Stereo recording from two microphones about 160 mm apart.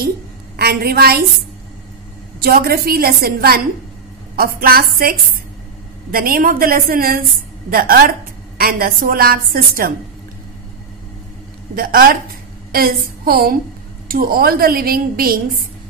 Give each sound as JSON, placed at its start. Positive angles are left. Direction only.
{"t": 0.6, "sound": "a woman's voice", "side_deg": -75}
{"t": 2.4, "sound": "a woman's voice", "side_deg": -75}
{"t": 6.1, "sound": "a woman's voice", "side_deg": -65}
{"t": 11.7, "sound": "a woman's voice", "side_deg": -65}